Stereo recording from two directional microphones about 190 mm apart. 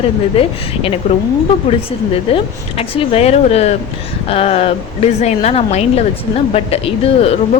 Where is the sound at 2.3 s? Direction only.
30° left (ahead or behind).